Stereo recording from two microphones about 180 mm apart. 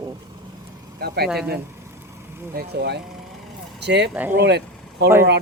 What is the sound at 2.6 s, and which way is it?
Speech, 65° right (ahead or behind).